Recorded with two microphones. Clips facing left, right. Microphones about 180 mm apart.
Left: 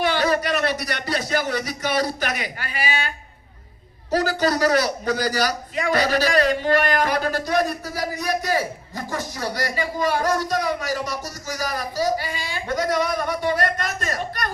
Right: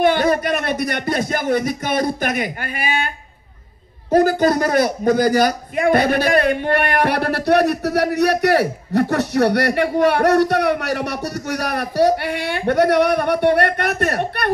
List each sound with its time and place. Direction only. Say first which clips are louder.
0.0 s a man's voice: right 5 dB; 50° right (ahead or behind)
4.1 s a man's voice: right 6 dB; 50° right (ahead or behind)